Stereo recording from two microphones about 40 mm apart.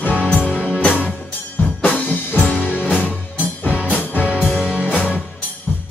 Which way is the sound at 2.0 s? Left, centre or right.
Left.